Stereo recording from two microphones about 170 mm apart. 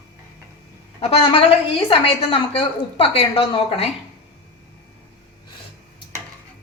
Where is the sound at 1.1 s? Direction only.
35° left (ahead or behind).